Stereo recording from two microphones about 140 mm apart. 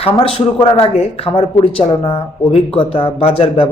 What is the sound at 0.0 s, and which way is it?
Speech, 45° left (ahead or behind).